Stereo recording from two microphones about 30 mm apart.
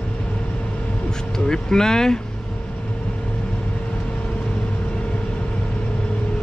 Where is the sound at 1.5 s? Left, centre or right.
Left.